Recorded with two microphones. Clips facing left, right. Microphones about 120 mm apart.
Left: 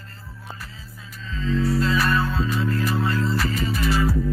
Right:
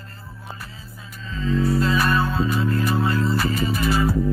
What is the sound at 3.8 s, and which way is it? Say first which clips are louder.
Music: right 1 dB; 25° right (ahead or behind).